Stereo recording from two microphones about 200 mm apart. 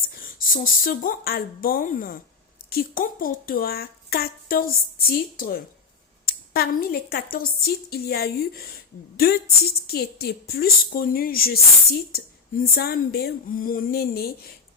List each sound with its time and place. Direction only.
0.1 s speech: 45° left (ahead or behind)